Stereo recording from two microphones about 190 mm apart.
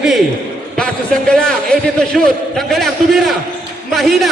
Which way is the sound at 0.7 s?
5° left (ahead or behind).